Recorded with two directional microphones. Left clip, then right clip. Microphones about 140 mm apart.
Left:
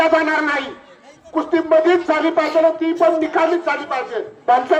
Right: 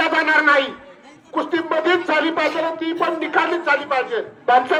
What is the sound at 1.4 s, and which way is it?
A man's voice, 85° left.